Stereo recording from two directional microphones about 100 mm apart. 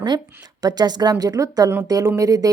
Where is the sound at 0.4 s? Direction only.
40° right (ahead or behind).